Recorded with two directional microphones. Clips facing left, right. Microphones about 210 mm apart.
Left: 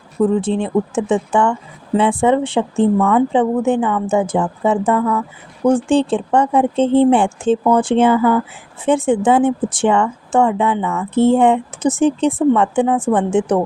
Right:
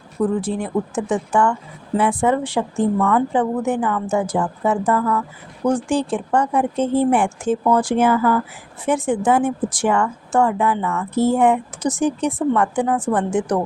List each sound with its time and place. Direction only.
0.3 s speech: 25° left (ahead or behind)